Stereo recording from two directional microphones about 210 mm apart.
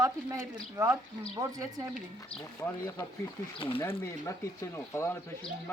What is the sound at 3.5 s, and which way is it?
Speech, 25° left (ahead or behind).